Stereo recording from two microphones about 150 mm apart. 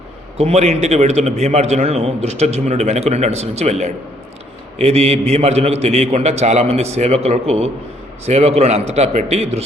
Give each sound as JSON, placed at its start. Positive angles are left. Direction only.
{"t": 0.3, "sound": "a man's voice", "side_deg": -45}